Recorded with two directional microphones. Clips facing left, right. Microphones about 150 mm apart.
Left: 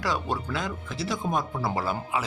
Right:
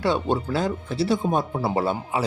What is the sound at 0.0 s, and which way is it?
Speech, 25° right (ahead or behind).